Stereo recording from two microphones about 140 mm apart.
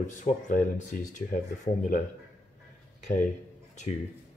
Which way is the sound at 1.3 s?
65° left (ahead or behind).